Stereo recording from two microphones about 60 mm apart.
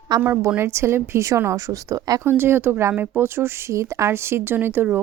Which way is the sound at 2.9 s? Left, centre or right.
Right.